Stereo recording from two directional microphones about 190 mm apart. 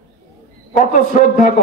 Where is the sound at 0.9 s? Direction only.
45° left (ahead or behind).